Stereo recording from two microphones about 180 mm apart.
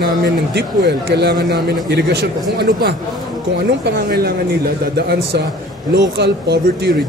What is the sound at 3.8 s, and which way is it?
Speech, 60° right (ahead or behind).